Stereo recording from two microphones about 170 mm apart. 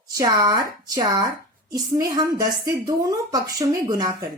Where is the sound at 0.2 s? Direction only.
20° right (ahead or behind).